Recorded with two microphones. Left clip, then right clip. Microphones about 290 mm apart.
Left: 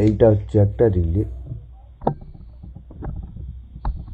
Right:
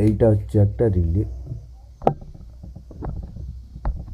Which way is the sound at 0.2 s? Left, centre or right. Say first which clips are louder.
Left 3 dB; left.